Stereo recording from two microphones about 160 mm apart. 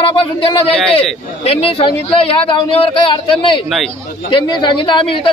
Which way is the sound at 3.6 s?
Centre (ahead or behind).